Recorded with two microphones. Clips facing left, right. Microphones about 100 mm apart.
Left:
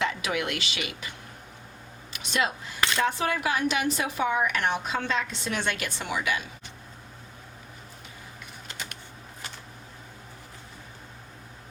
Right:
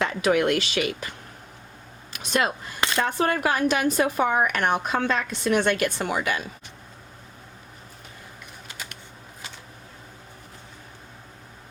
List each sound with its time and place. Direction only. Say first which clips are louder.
0.0 s a woman's voice: right 7 dB; 45° right (ahead or behind)
2.1 s a woman's voice: right 4 dB; 45° right (ahead or behind)